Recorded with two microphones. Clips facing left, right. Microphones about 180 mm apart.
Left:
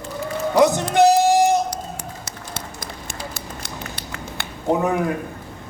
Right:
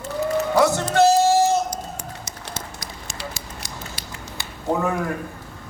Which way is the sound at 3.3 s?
60° left (ahead or behind).